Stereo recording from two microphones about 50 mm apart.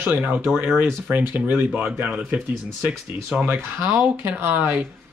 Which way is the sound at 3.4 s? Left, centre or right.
Right.